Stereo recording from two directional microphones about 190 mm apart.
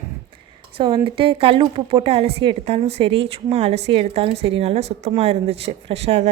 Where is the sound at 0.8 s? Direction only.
25° right (ahead or behind).